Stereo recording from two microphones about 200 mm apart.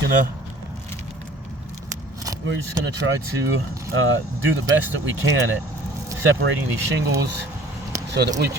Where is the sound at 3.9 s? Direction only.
85° right.